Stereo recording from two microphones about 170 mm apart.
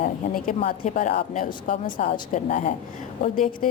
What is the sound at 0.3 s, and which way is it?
A woman's voice, 55° left (ahead or behind).